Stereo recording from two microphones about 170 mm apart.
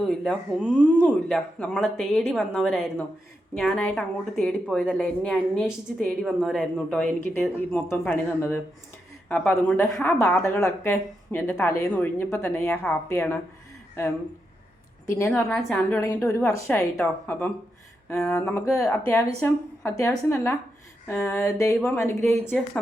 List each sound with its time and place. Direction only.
0.0 s speech: centre (ahead or behind)
0.8 s a woman's voice: 10° left (ahead or behind)
15.3 s a woman's voice: 5° left (ahead or behind)